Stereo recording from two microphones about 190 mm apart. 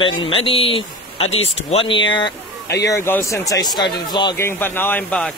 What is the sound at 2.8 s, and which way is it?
Speech, 15° left (ahead or behind).